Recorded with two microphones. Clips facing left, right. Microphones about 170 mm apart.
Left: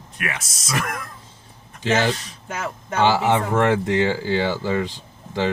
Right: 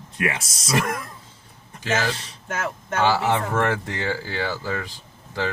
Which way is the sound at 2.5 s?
10° left (ahead or behind).